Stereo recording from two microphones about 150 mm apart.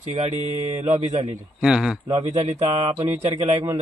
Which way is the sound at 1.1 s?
45° right (ahead or behind).